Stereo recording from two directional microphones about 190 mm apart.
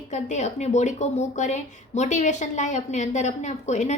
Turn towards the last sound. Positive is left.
turn(degrees=40)  # may be behind; listen again after turning